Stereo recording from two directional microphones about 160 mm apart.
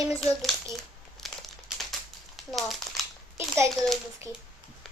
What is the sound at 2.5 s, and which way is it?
Crumpling, centre (ahead or behind).